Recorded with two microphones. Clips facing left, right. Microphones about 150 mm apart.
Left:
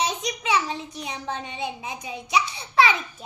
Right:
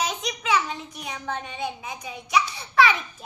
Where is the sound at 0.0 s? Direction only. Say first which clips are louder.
Left 2 dB; 30° left (ahead or behind).